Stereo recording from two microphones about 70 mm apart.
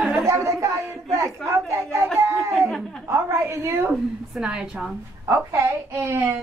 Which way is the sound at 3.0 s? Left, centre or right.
Right.